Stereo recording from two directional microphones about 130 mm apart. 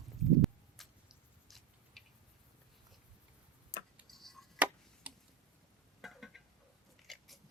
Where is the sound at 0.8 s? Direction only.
Centre (ahead or behind).